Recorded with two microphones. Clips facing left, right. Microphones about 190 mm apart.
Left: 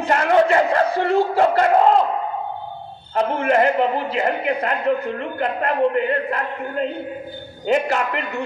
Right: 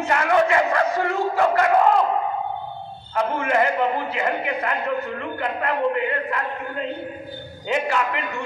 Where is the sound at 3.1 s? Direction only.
35° left (ahead or behind).